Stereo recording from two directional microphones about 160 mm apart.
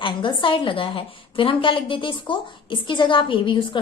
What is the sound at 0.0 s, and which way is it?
A woman's voice, 30° left (ahead or behind).